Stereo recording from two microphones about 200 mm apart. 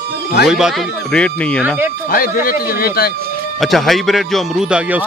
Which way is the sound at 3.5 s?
Centre (ahead or behind).